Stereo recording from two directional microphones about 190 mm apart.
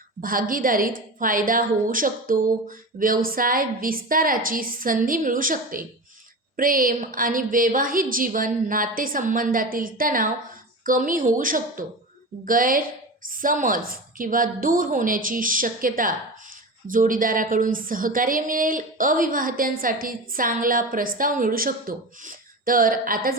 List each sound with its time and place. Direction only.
0.2 s a woman's voice: 50° right (ahead or behind)